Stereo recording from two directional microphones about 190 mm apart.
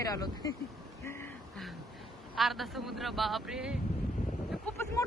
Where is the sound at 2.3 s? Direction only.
Centre (ahead or behind).